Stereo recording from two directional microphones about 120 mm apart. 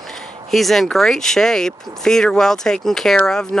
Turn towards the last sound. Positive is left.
turn(degrees=5)  # may be behind; listen again after turning